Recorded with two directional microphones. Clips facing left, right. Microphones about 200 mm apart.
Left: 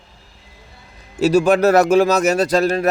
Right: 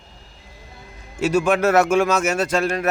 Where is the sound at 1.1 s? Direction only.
35° left (ahead or behind).